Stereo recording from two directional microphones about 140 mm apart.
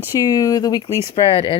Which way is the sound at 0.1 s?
25° left (ahead or behind).